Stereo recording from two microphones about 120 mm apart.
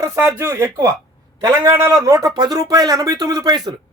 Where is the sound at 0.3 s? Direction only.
25° right (ahead or behind).